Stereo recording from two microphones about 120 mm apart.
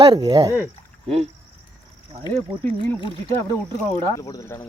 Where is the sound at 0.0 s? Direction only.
30° right (ahead or behind).